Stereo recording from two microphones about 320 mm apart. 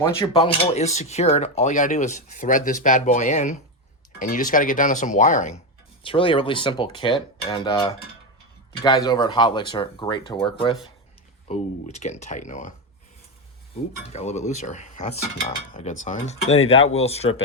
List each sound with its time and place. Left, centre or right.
0.2 s speech: centre
14.1 s speech: left